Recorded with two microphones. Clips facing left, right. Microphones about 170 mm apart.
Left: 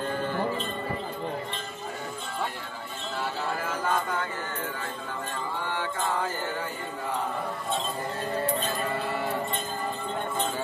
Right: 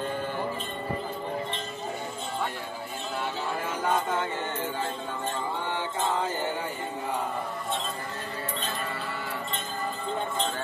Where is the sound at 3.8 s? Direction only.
20° right (ahead or behind).